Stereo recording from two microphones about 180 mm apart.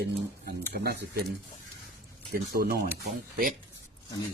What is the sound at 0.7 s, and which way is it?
Speech, 60° right (ahead or behind).